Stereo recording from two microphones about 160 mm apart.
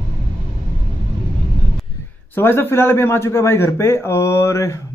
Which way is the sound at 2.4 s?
15° left (ahead or behind).